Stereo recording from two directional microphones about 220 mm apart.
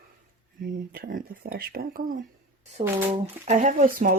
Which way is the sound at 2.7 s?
30° right (ahead or behind).